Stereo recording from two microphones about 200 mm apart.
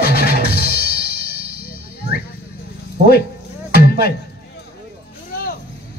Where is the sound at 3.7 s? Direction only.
50° left (ahead or behind).